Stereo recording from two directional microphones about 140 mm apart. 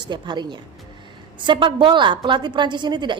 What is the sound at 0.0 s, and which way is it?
A woman's voice, 30° right (ahead or behind).